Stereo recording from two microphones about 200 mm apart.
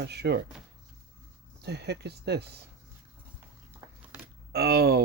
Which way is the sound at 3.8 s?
10° right (ahead or behind).